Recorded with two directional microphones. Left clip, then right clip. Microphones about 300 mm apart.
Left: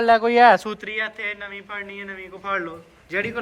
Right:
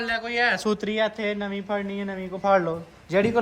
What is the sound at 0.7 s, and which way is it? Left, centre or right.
A man's voice, centre.